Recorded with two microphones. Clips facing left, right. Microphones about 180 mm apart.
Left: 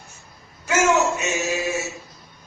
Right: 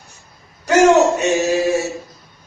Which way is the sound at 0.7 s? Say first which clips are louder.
Right 8 dB; 35° right (ahead or behind).